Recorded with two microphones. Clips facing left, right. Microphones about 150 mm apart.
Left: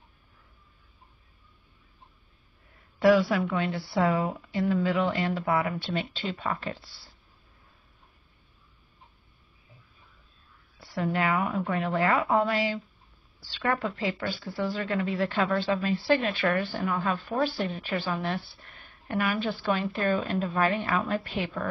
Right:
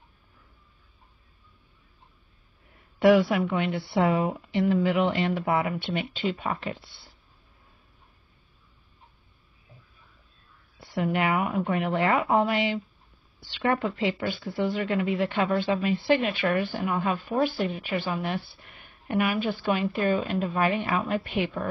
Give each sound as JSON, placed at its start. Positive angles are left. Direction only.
{"t": 3.0, "sound": "a woman's voice", "side_deg": -20}
{"t": 10.8, "sound": "a woman's voice", "side_deg": -20}